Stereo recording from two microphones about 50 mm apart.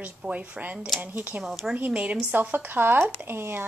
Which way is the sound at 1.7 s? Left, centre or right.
Right.